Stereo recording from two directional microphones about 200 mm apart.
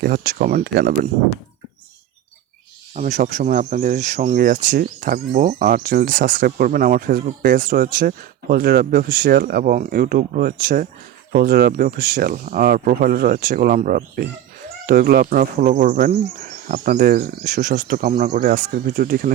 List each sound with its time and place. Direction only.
0.0 s speech: 50° right (ahead or behind)
2.9 s speech: 35° right (ahead or behind)
17.7 s speech: 50° right (ahead or behind)
18.1 s speech: 40° right (ahead or behind)